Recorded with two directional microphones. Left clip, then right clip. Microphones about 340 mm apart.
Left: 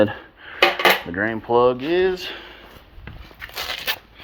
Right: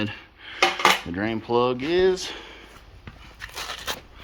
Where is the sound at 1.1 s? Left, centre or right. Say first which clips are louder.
Left 5 dB; centre.